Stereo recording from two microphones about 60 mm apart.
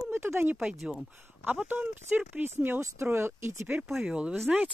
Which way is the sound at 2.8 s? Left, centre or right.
Right.